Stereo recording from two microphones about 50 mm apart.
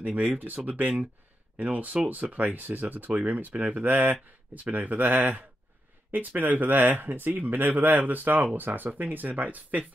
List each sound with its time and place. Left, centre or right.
0.0 s speech: right